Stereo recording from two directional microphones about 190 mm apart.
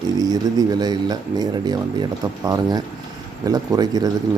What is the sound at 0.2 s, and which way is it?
Speech, 20° right (ahead or behind).